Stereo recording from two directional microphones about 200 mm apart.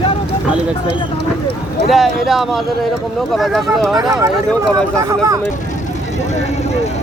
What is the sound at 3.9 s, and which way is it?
Speech, 15° right (ahead or behind).